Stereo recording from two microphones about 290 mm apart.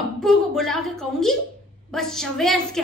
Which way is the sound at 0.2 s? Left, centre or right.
Centre.